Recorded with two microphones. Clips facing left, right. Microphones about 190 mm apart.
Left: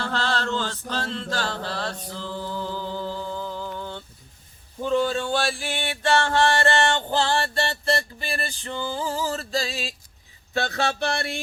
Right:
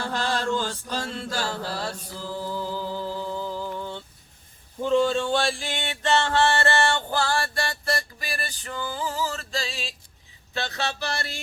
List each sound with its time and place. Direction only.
0.0 s chant: 15° right (ahead or behind)
4.8 s a sound: centre (ahead or behind); by 9.9 s 40° left (ahead or behind)
10.5 s music: 50° left (ahead or behind)